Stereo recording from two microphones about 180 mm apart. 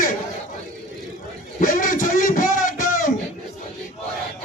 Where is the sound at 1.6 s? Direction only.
45° left (ahead or behind).